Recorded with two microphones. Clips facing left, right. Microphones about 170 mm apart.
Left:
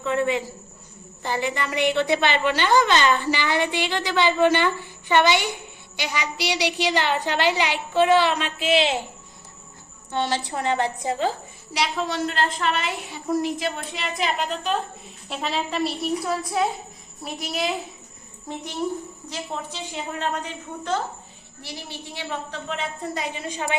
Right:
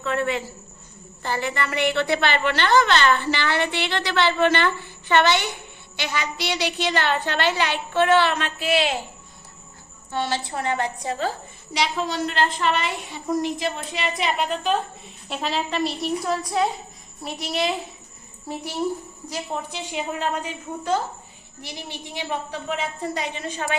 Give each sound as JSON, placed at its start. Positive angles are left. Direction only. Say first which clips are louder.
{"t": 0.0, "sound": "a woman's voice", "louder": "left 2 dB", "side_deg": 15}
{"t": 10.1, "sound": "a woman's voice", "louder": "left 1 dB", "side_deg": 20}
{"t": 11.7, "sound": "a woman's voice", "louder": "right 1 dB", "side_deg": 0}
{"t": 19.3, "sound": "a woman's voice", "louder": "right 3 dB", "side_deg": -10}